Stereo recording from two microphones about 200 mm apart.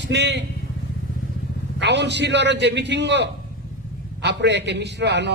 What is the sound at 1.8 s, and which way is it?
A man's voice, 60° right (ahead or behind).